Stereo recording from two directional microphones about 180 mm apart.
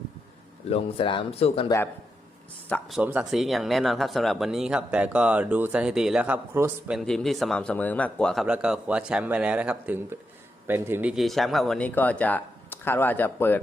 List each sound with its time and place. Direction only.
0.7 s speech: 30° left (ahead or behind)
2.6 s speech: 10° left (ahead or behind)
3.0 s a man's voice: 5° right (ahead or behind)
11.1 s speech: centre (ahead or behind)